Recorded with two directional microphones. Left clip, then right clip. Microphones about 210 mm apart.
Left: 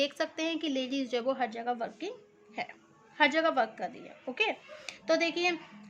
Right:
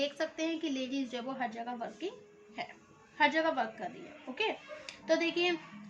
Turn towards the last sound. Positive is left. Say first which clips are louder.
# left 2 dB
turn(degrees=55)  # may be behind; listen again after turning